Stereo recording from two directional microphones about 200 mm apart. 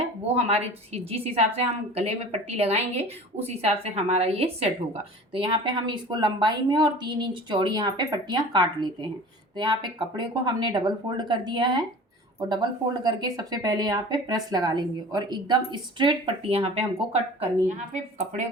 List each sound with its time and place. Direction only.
0.0 s a woman's voice: 30° right (ahead or behind)